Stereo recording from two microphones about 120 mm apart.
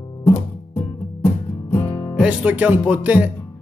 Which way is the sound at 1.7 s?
15° left (ahead or behind).